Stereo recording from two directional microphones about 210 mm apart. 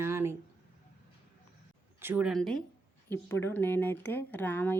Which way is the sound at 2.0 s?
10° right (ahead or behind).